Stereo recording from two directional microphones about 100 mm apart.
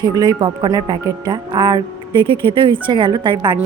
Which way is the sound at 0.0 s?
45° right (ahead or behind).